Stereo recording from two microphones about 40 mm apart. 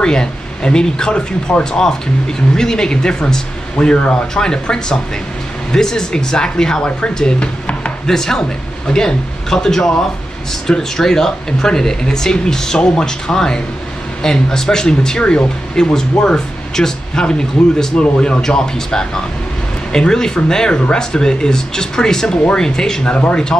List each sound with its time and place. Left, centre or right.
0.0 s speech: left